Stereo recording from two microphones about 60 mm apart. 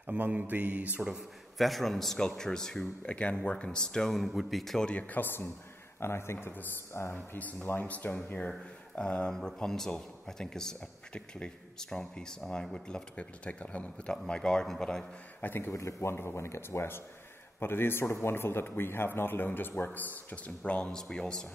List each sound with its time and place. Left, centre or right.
0.0 s mantra: right
1.6 s a man's voice: centre
3.0 s a man's voice: centre
4.8 s speech: left
7.3 s a man's voice: left; by 15.0 s centre
15.4 s speech: left
15.7 s speech: left; by 21.5 s centre